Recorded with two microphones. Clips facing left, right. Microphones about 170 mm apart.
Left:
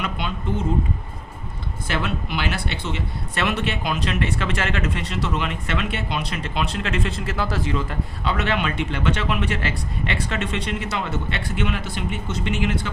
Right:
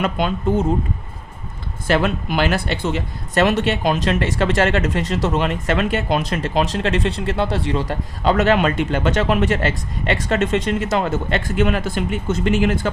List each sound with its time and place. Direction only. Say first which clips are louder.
0.0 s speech: right 8 dB; 45° right (ahead or behind)
1.9 s speech: right 8 dB; 50° right (ahead or behind)